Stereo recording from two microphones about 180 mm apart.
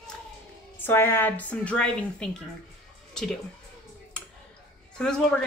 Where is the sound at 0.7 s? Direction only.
10° left (ahead or behind).